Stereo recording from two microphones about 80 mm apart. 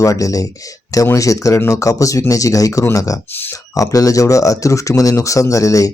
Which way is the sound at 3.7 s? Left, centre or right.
Left.